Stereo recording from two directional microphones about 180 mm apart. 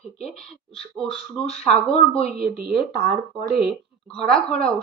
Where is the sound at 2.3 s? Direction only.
55° right (ahead or behind).